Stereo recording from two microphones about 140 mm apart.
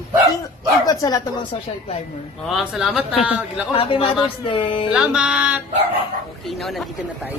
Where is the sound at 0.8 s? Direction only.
25° left (ahead or behind).